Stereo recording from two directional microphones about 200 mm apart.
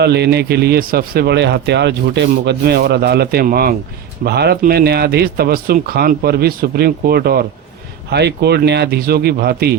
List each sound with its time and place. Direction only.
0.0 s speech: 55° right (ahead or behind)